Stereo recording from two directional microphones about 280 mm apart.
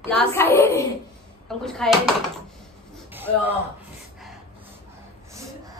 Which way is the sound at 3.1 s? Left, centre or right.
Centre.